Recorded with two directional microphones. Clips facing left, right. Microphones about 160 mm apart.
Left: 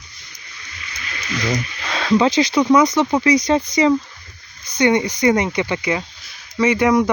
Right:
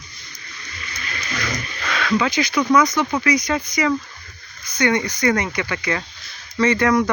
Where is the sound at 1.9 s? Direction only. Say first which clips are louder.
Left 4 dB; 30° left (ahead or behind).